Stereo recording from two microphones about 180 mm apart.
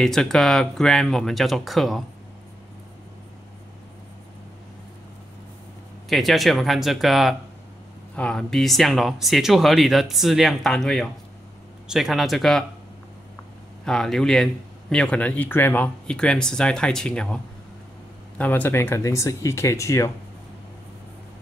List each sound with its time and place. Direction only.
0.0 s speech: 5° left (ahead or behind)
6.0 s speech: centre (ahead or behind)
13.8 s speech: 5° left (ahead or behind)
18.4 s speech: 10° left (ahead or behind)